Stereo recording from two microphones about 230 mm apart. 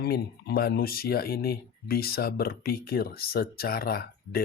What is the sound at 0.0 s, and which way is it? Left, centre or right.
Speech, left.